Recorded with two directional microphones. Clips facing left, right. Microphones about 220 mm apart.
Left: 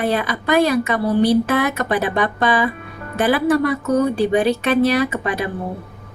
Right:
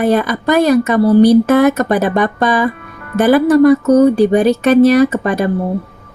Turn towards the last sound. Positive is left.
turn(degrees=-45)  # may be behind; listen again after turning